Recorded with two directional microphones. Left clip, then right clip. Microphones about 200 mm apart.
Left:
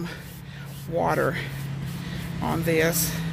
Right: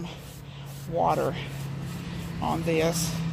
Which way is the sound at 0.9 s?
20° left (ahead or behind).